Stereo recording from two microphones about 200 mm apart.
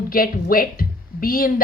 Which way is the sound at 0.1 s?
45° left (ahead or behind).